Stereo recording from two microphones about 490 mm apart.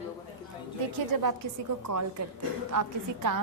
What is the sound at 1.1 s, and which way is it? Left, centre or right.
Speech, right.